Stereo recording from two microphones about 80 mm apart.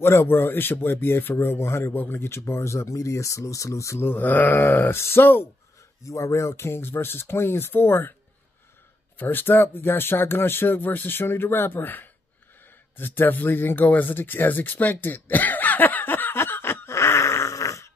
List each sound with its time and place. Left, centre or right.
0.0 s speech: left
6.0 s speech: left
9.2 s speech: left
12.9 s a sound: left